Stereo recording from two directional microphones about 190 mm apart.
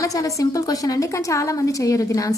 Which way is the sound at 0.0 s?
15° left (ahead or behind).